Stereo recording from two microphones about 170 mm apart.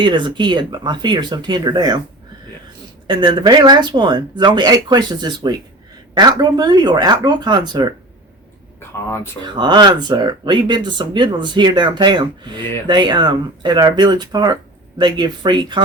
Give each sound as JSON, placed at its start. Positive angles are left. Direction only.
{"t": 0.0, "sound": "speech", "side_deg": -30}
{"t": 3.1, "sound": "speech", "side_deg": -25}
{"t": 9.0, "sound": "speech", "side_deg": 15}
{"t": 9.6, "sound": "speech", "side_deg": -25}